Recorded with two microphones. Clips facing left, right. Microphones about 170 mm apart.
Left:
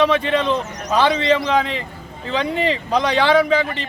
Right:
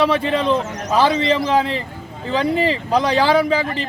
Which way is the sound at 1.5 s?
35° right (ahead or behind).